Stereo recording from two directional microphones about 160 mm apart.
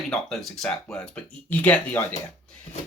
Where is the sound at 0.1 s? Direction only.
Centre (ahead or behind).